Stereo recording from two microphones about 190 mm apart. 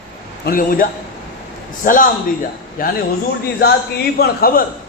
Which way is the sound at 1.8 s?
45° left (ahead or behind).